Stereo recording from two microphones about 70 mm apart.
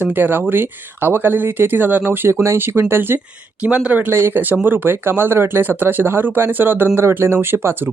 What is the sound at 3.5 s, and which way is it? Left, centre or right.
Speech, centre.